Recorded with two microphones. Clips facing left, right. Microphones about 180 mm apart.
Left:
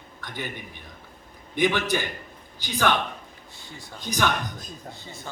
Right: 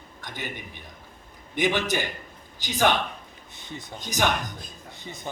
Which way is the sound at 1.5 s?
15° right (ahead or behind).